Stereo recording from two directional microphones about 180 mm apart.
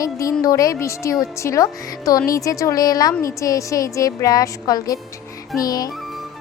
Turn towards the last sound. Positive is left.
turn(degrees=20)  # may be behind; listen again after turning